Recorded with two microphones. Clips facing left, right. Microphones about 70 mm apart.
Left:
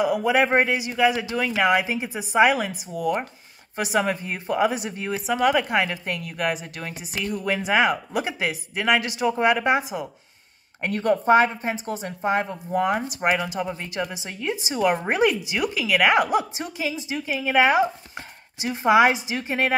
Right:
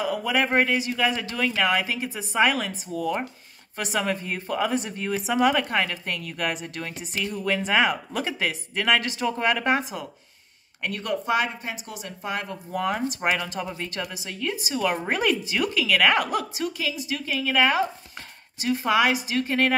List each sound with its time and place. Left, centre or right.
0.0 s speech: centre
10.8 s a woman's voice: left; by 14.0 s centre
14.1 s a woman's voice: left